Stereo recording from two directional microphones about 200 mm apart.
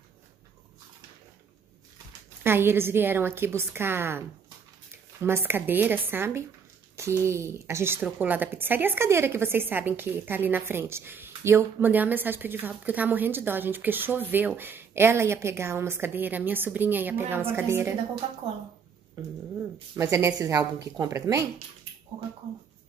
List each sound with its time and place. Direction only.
2.4 s a woman's voice: 10° right (ahead or behind)
5.2 s a woman's voice: 10° right (ahead or behind)
20.0 s a woman's voice: 15° right (ahead or behind)